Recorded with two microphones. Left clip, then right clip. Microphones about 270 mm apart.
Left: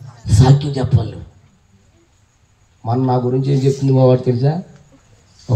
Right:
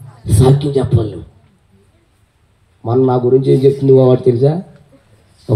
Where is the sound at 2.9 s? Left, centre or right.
Right.